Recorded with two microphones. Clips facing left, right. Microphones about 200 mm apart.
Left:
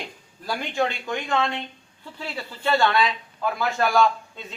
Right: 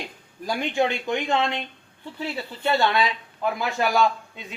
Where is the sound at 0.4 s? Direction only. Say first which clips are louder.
Right 2 dB; 20° right (ahead or behind).